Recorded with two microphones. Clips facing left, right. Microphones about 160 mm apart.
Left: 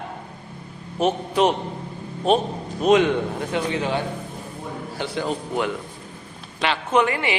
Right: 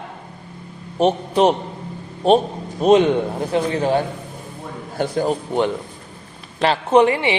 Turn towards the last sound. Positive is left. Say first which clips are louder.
# right 6 dB
turn(degrees=-25)  # may be behind; listen again after turning